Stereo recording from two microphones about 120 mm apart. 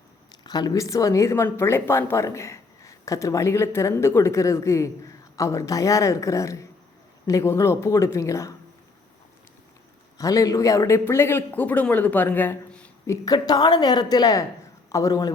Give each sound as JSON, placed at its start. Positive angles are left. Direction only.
{"t": 0.3, "sound": "a woman's voice", "side_deg": 35}
{"t": 10.2, "sound": "speech", "side_deg": 30}
{"t": 13.1, "sound": "a woman's voice", "side_deg": 30}